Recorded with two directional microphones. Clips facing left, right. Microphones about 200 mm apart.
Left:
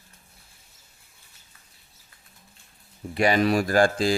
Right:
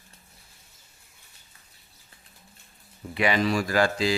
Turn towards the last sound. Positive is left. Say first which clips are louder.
# left 3 dB
turn(degrees=50)  # may be behind; listen again after turning